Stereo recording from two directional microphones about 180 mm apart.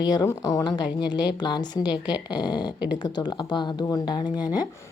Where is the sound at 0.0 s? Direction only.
20° left (ahead or behind).